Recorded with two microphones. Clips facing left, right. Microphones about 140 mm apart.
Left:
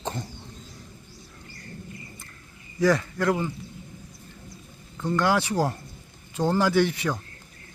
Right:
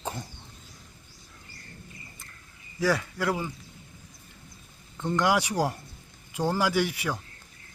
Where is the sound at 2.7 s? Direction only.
10° right (ahead or behind).